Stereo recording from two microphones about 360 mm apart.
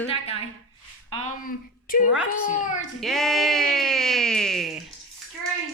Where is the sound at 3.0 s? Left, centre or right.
Centre.